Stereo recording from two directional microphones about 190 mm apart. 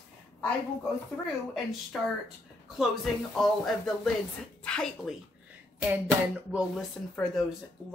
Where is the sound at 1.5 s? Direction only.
Centre (ahead or behind).